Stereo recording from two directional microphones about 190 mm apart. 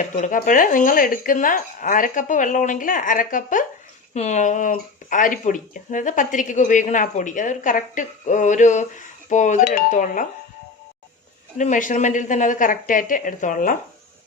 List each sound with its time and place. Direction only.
0.0 s speech: 45° left (ahead or behind)
11.5 s speech: 40° left (ahead or behind)